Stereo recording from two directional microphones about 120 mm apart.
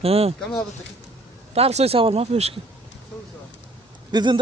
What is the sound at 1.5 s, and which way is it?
Speech, 60° right (ahead or behind).